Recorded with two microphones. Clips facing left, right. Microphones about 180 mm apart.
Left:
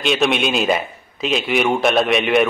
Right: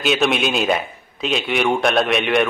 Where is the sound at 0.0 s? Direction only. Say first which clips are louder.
Left 1 dB; centre (ahead or behind).